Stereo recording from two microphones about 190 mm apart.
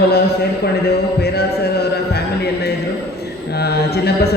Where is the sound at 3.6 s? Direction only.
55° left (ahead or behind).